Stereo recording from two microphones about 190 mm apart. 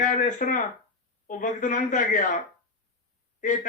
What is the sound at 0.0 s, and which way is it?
A man's voice, 40° left (ahead or behind).